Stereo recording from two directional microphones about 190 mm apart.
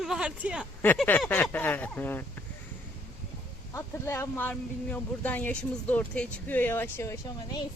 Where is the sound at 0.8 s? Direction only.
10° left (ahead or behind).